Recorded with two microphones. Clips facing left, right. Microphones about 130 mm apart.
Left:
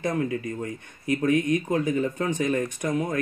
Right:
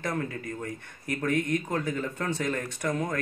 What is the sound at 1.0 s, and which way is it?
Speech, 15° left (ahead or behind).